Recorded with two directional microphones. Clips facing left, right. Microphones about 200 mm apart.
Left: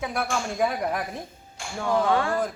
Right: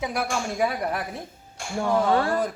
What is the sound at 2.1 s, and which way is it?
Speech, 35° right (ahead or behind).